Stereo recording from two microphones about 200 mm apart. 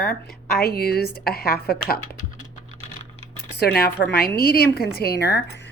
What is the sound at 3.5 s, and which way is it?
A woman's voice, 50° left (ahead or behind).